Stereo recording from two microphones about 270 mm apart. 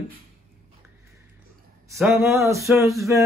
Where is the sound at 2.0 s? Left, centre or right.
Centre.